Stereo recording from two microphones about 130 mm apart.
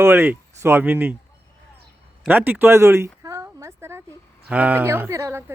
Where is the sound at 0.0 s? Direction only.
15° right (ahead or behind).